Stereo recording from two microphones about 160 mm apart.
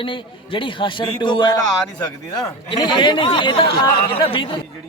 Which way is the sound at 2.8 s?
30° left (ahead or behind).